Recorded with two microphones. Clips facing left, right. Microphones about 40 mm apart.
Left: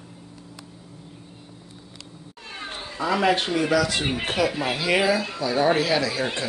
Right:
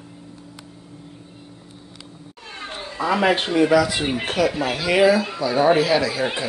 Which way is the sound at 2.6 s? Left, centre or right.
Centre.